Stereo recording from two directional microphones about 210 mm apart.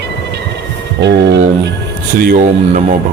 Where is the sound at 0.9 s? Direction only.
55° right (ahead or behind).